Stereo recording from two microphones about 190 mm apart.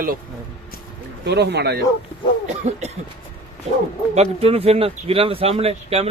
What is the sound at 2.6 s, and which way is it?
Speech, 35° right (ahead or behind).